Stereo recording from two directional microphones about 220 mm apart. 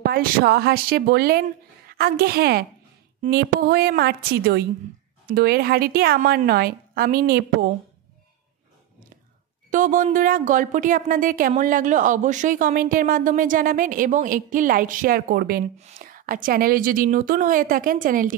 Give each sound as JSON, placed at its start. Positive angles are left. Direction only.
{"t": 0.0, "sound": "a woman's voice", "side_deg": -45}
{"t": 9.7, "sound": "speech", "side_deg": -35}